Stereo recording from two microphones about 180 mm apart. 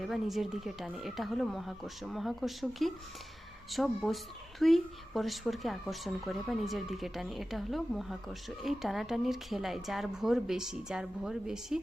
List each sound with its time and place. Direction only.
0.0 s a woman's voice: centre (ahead or behind)